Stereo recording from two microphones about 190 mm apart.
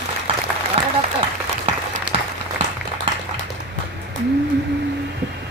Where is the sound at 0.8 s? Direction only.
30° right (ahead or behind).